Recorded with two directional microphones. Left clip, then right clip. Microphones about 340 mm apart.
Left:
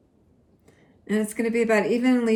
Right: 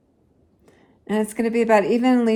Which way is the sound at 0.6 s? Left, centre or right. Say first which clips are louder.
Right 2 dB; right.